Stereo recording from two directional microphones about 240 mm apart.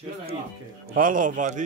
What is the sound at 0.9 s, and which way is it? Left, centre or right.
Speech, right.